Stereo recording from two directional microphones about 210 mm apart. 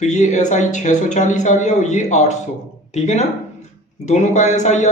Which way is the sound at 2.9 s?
30° left (ahead or behind).